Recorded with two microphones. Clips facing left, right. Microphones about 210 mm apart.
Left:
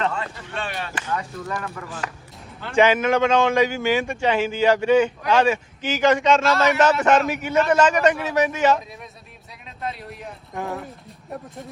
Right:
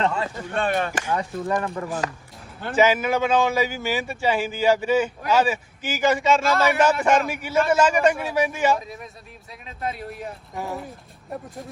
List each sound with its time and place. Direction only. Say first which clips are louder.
0.5 s speech: right 7 dB; 50° right (ahead or behind)
1.1 s speech: right 3 dB; 30° right (ahead or behind)
2.7 s a man's voice: left 2 dB; 5° right (ahead or behind)